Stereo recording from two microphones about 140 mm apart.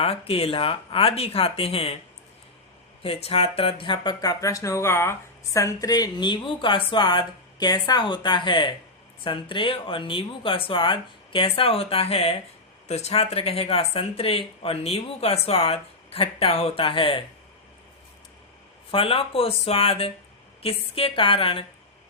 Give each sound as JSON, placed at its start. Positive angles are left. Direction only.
{"t": 0.0, "sound": "speech", "side_deg": 45}
{"t": 3.0, "sound": "speech", "side_deg": 45}
{"t": 18.9, "sound": "speech", "side_deg": 40}